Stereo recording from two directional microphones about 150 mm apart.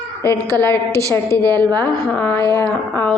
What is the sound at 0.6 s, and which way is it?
A woman's voice, 15° left (ahead or behind).